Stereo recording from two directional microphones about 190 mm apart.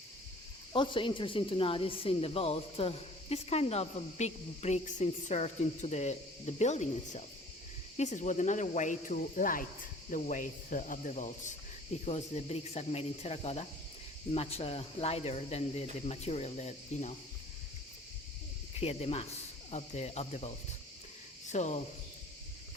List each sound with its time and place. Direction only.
0.7 s speech: 25° left (ahead or behind)
18.8 s speech: 30° left (ahead or behind)
21.5 s speech: 40° left (ahead or behind)